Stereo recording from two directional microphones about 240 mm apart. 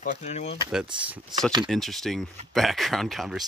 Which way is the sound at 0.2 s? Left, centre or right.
Left.